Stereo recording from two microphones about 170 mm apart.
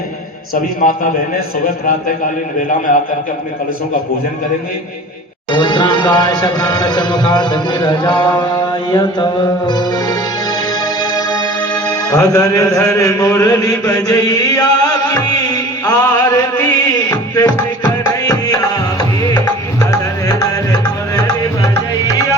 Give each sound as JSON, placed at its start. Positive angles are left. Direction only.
{"t": 0.5, "sound": "a man's voice", "side_deg": 55}
{"t": 5.5, "sound": "speech", "side_deg": 25}
{"t": 8.9, "sound": "music", "side_deg": 25}